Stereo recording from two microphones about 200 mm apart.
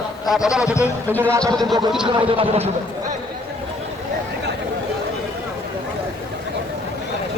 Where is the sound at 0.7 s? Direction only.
10° left (ahead or behind).